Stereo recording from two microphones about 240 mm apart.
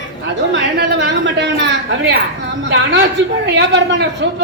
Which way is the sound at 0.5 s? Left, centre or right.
Right.